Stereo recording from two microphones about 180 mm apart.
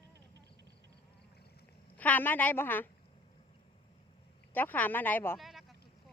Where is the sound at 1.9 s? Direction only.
10° left (ahead or behind).